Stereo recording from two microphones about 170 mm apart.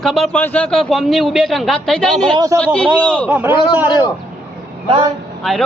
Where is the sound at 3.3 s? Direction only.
10° right (ahead or behind).